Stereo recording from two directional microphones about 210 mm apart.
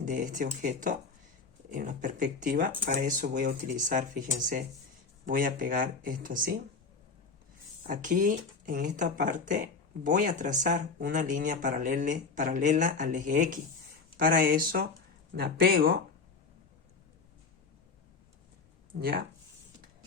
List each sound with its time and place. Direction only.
0.0 s speech: 40° right (ahead or behind)
7.9 s speech: 40° right (ahead or behind)
18.9 s speech: 45° right (ahead or behind)